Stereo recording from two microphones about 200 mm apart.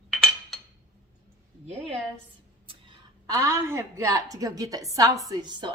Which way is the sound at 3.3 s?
15° right (ahead or behind).